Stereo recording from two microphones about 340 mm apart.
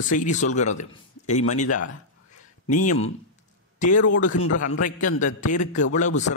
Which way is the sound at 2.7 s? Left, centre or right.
Left.